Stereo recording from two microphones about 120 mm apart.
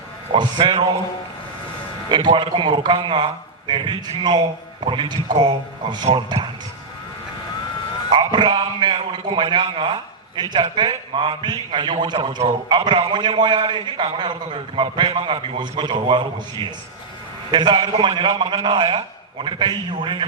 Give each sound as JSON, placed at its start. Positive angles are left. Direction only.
{"t": 0.3, "sound": "a man's voice", "side_deg": -45}
{"t": 2.0, "sound": "a man's voice", "side_deg": -40}
{"t": 8.1, "sound": "a man's voice", "side_deg": -40}